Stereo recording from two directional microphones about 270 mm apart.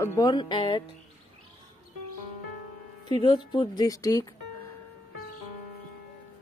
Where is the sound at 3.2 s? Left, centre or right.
Centre.